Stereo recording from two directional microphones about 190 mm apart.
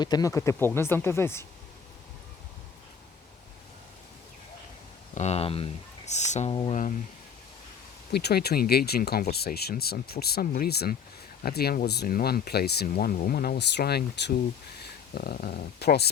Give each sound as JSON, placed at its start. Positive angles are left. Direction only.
{"t": 0.0, "sound": "speech", "side_deg": 20}
{"t": 5.1, "sound": "speech", "side_deg": 35}
{"t": 8.1, "sound": "speech", "side_deg": 55}